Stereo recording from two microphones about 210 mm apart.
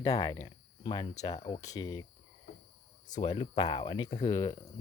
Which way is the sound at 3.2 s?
25° left (ahead or behind).